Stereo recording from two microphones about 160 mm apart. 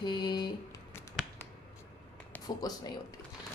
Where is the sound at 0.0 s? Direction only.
25° left (ahead or behind).